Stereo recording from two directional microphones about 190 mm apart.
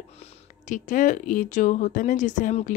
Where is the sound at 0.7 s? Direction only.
40° left (ahead or behind).